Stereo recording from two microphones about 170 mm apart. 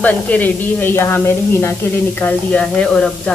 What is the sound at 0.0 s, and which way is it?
A woman's voice, 10° left (ahead or behind).